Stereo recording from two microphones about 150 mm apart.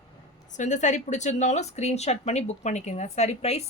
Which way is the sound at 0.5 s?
55° left (ahead or behind).